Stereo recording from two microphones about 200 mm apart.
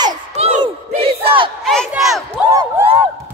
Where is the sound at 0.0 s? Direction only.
30° right (ahead or behind).